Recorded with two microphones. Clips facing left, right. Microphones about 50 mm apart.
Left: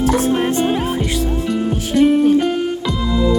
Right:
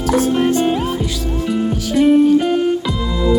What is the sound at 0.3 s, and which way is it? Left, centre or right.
Music, centre.